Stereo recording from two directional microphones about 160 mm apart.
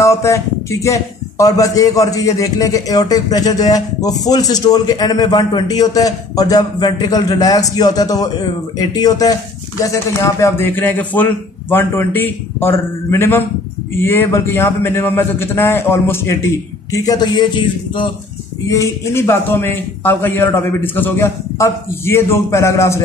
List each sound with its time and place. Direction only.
0.0 s a man's voice: 20° left (ahead or behind)
18.7 s a man's voice: 20° left (ahead or behind)